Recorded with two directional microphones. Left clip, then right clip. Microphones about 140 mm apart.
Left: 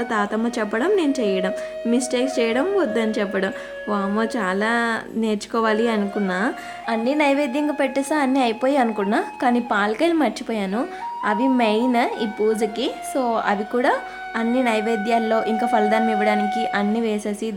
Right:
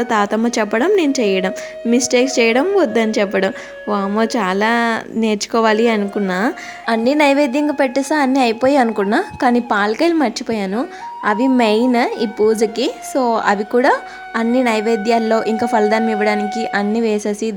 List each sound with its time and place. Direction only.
0.0 s a woman's voice: 40° right (ahead or behind)